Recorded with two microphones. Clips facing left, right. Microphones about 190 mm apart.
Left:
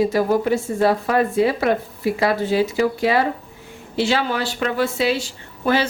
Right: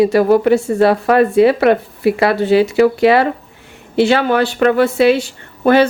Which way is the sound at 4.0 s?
60° right (ahead or behind).